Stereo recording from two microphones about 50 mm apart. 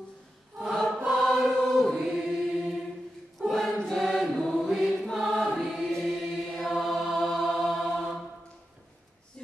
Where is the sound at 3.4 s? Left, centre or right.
Centre.